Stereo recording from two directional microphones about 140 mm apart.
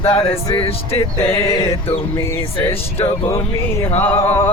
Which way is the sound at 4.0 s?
15° left (ahead or behind).